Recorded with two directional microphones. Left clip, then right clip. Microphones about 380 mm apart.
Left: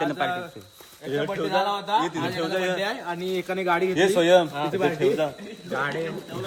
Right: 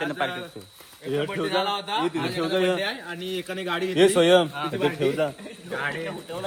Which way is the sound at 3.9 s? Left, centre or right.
Right.